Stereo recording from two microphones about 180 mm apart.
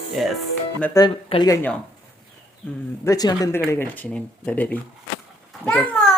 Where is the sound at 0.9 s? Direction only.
20° left (ahead or behind).